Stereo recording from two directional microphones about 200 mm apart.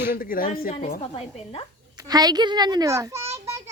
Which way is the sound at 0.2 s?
45° left (ahead or behind).